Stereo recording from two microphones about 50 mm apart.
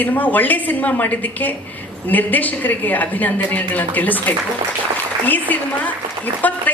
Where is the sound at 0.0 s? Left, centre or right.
Left.